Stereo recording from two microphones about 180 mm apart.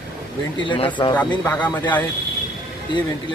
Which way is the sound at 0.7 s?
25° left (ahead or behind).